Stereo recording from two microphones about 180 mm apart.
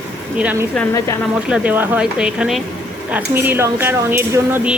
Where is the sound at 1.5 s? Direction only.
10° right (ahead or behind).